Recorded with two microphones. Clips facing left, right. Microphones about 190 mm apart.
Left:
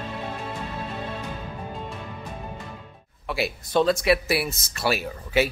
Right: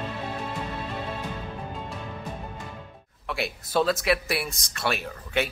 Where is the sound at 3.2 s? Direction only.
Centre (ahead or behind).